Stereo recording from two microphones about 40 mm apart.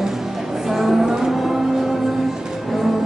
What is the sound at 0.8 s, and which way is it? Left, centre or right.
Music, centre.